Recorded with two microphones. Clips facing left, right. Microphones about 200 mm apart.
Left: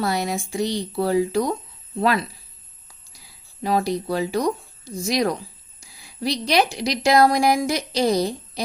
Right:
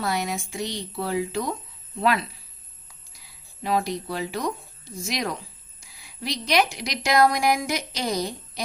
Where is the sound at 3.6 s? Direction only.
35° left (ahead or behind).